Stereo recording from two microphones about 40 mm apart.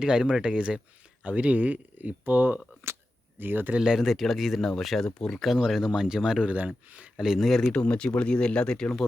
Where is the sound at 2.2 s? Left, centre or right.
Right.